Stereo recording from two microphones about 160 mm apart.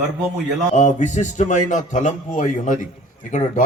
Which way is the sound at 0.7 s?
50° left (ahead or behind).